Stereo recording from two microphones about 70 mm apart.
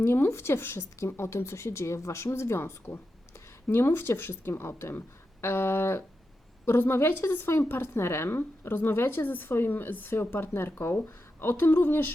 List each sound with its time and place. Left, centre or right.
0.0 s a woman's voice: left